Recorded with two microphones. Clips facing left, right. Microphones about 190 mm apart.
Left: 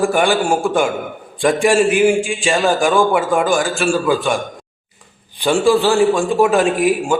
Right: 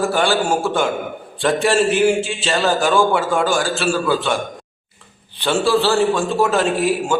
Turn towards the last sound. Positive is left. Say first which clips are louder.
# left 3 dB
turn(degrees=15)  # may be behind; listen again after turning